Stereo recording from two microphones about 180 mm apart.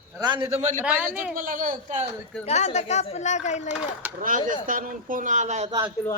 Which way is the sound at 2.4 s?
40° left (ahead or behind).